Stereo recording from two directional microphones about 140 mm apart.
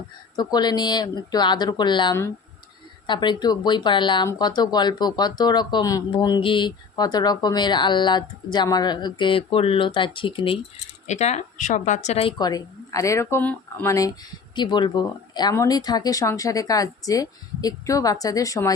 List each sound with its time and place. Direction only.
0.3 s speech: 30° left (ahead or behind)
11.0 s speech: 55° left (ahead or behind)
12.4 s speech: 25° left (ahead or behind)
14.5 s speech: 35° left (ahead or behind)